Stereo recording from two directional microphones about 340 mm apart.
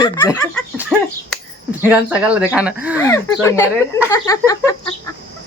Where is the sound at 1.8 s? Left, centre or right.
Centre.